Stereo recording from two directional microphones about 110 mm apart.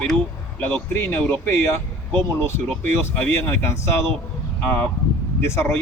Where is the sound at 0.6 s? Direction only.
20° left (ahead or behind).